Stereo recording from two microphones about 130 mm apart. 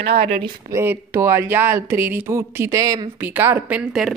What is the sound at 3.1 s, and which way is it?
Speech, 15° right (ahead or behind).